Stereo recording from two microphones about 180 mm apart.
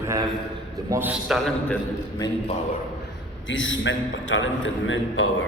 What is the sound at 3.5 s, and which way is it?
A man's voice, 90° left.